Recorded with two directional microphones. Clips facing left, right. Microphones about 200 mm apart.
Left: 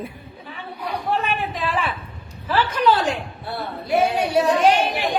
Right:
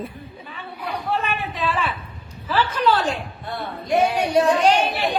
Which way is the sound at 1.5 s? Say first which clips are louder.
Even; 15° left (ahead or behind).